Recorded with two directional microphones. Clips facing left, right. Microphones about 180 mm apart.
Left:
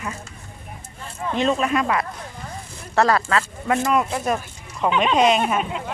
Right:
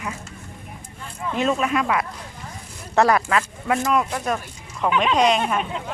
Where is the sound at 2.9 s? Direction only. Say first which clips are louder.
Right 1 dB; 15° right (ahead or behind).